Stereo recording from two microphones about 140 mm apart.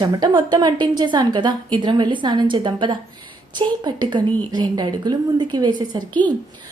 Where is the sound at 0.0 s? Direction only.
30° right (ahead or behind).